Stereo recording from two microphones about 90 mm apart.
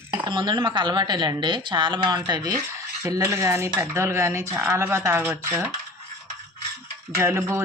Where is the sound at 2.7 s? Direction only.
35° right (ahead or behind).